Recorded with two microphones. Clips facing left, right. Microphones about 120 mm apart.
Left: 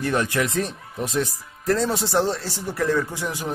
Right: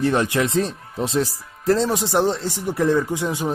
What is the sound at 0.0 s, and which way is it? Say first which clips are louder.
Speech: right 3 dB; 20° right (ahead or behind).